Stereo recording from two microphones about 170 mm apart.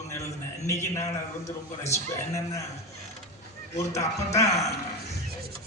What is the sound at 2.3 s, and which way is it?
Speech, 20° left (ahead or behind).